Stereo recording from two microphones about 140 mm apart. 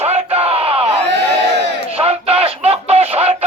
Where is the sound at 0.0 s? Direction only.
45° right (ahead or behind).